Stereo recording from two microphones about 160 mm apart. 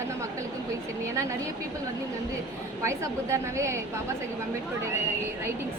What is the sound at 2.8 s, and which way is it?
Speech, 15° right (ahead or behind).